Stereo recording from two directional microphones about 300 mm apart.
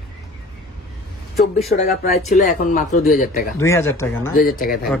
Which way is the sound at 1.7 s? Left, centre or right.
Left.